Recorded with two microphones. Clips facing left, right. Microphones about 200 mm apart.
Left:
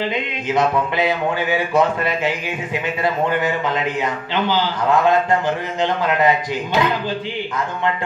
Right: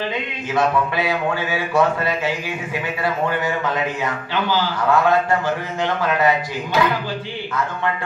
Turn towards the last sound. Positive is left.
turn(degrees=20)  # may be behind; listen again after turning